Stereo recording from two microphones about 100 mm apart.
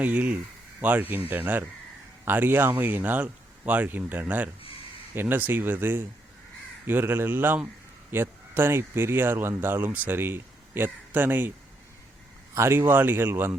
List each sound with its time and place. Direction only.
0.0 s speech: 15° right (ahead or behind)
12.5 s speech: 25° right (ahead or behind)